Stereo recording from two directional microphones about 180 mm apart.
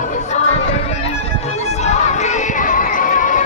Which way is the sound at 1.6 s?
40° left (ahead or behind).